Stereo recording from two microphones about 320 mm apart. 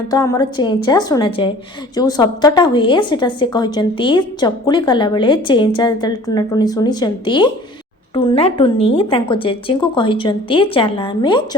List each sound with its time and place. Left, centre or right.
0.1 s a woman's voice: centre